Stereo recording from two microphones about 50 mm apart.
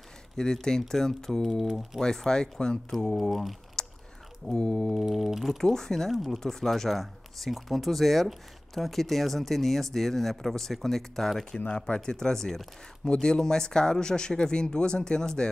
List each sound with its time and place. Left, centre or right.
0.4 s speech: centre
3.8 s chewing: centre
4.5 s speech: centre
4.9 s speech: centre
5.6 s speech: centre